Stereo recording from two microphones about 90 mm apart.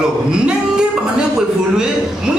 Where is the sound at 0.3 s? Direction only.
10° right (ahead or behind).